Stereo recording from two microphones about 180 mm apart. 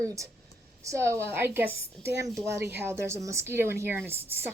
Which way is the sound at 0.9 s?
15° right (ahead or behind).